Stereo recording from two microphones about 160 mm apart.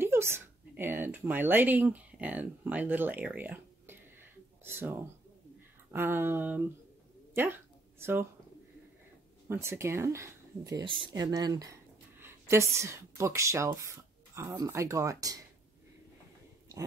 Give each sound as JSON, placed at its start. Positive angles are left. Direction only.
{"t": 0.0, "sound": "a woman's voice", "side_deg": -15}
{"t": 3.3, "sound": "a sound", "side_deg": -10}
{"t": 4.6, "sound": "speech", "side_deg": -15}
{"t": 5.9, "sound": "speech", "side_deg": -15}
{"t": 7.3, "sound": "a sound", "side_deg": -15}
{"t": 9.5, "sound": "speech", "side_deg": -15}